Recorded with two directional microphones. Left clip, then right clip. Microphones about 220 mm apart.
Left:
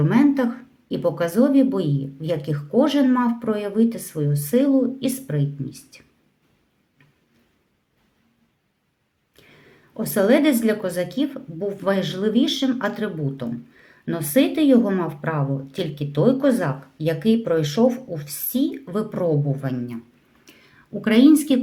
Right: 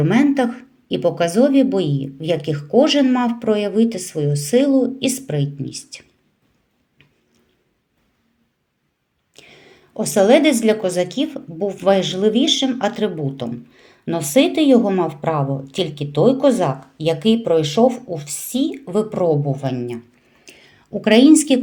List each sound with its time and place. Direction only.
0.0 s speech: 15° right (ahead or behind)
4.1 s a sound: 20° right (ahead or behind)
4.5 s speech: 20° right (ahead or behind)
5.4 s speech: 15° left (ahead or behind)
10.4 s speech: 15° right (ahead or behind)
20.4 s whispering: 15° right (ahead or behind)